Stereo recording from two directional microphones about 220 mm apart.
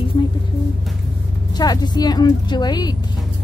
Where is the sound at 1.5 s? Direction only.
20° left (ahead or behind).